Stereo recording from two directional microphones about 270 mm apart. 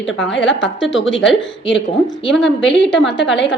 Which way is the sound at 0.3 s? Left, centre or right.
Left.